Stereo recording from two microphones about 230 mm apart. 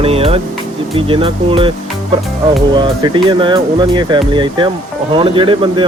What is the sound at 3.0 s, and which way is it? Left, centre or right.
Speech, right.